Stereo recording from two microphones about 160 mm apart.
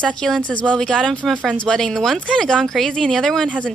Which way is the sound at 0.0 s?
5° left (ahead or behind).